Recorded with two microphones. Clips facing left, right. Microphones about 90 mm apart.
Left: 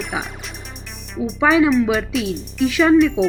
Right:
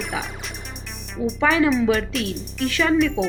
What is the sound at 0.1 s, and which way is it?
Speech, 20° left (ahead or behind).